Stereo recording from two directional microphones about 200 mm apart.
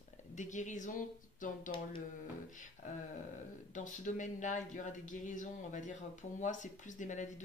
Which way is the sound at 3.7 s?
40° left (ahead or behind).